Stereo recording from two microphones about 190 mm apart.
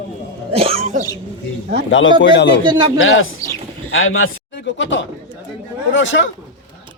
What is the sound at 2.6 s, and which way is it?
Speech, 25° right (ahead or behind).